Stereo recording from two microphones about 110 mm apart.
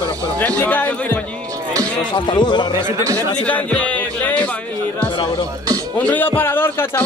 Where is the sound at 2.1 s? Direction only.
45° left (ahead or behind).